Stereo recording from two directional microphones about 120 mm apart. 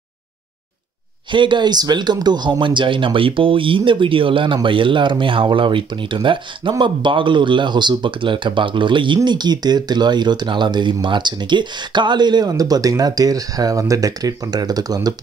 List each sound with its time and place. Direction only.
1.3 s speech: 40° right (ahead or behind)